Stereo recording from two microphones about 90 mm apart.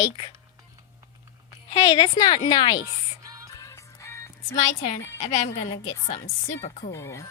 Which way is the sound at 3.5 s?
35° left (ahead or behind).